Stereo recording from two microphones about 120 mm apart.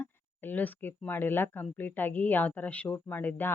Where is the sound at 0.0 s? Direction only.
15° left (ahead or behind).